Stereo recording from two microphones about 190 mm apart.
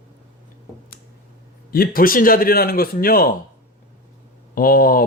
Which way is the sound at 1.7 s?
50° left (ahead or behind).